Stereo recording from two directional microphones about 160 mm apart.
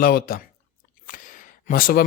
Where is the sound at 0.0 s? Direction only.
70° left (ahead or behind).